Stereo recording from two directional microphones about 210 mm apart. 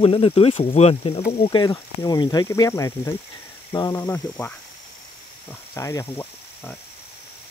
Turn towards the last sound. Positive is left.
turn(degrees=10)  # may be behind; listen again after turning